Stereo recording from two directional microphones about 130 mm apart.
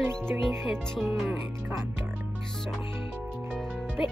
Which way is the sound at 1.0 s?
15° right (ahead or behind).